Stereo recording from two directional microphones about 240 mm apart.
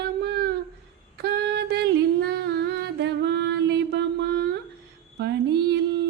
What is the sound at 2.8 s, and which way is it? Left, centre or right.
Mantra, right.